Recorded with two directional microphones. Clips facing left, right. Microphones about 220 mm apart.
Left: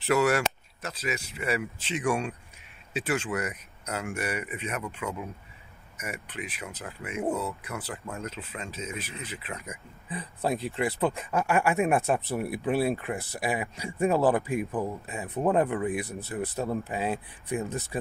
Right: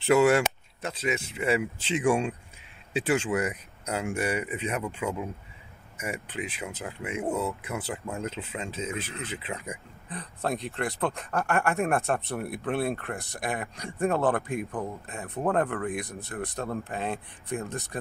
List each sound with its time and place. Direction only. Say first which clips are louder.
0.0 s speech: right 3 dB; 25° right (ahead or behind)
10.0 s speech: left 2 dB; 5° left (ahead or behind)